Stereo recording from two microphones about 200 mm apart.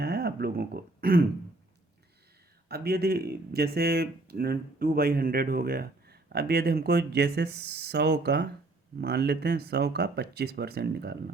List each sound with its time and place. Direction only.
0.0 s speech: 50° right (ahead or behind)
2.6 s speech: 50° right (ahead or behind)